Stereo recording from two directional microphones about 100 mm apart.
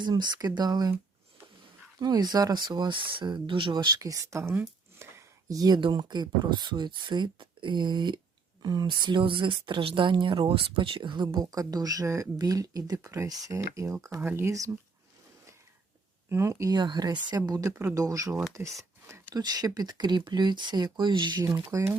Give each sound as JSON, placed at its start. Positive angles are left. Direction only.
{"t": 0.0, "sound": "speech", "side_deg": -45}
{"t": 2.0, "sound": "speech", "side_deg": -45}
{"t": 4.0, "sound": "speech", "side_deg": -35}
{"t": 5.0, "sound": "a sound", "side_deg": -25}
{"t": 5.5, "sound": "speech", "side_deg": -40}
{"t": 11.3, "sound": "speech", "side_deg": -35}
{"t": 14.2, "sound": "speech", "side_deg": -20}
{"t": 16.3, "sound": "speech", "side_deg": -30}
{"t": 16.7, "sound": "speech", "side_deg": -45}
{"t": 17.7, "sound": "speech", "side_deg": -25}
{"t": 18.8, "sound": "a sound", "side_deg": -25}
{"t": 19.3, "sound": "speech", "side_deg": -40}
{"t": 21.4, "sound": "speech", "side_deg": -30}